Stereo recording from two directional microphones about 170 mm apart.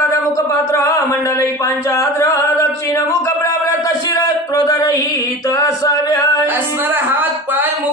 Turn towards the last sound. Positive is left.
turn(degrees=-10)  # may be behind; listen again after turning